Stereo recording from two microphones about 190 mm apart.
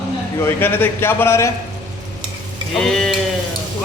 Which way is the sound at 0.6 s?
10° left (ahead or behind).